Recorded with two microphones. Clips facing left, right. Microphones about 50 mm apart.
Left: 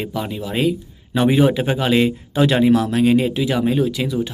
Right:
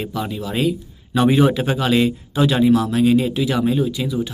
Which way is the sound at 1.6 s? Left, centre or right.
Left.